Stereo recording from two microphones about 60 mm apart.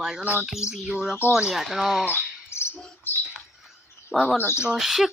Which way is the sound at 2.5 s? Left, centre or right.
Left.